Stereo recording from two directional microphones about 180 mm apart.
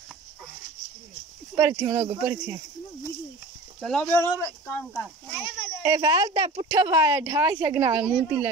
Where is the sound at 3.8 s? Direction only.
5° left (ahead or behind).